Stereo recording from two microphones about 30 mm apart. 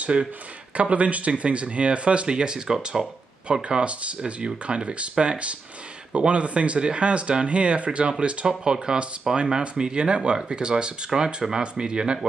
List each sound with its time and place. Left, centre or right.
0.7 s speech: right
2.2 s speech: right
3.8 s speech: right